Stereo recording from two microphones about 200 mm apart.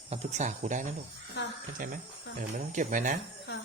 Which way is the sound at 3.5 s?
60° left (ahead or behind).